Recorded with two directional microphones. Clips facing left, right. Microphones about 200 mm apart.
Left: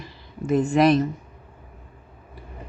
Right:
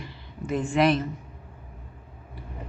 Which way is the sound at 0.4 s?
40° left (ahead or behind).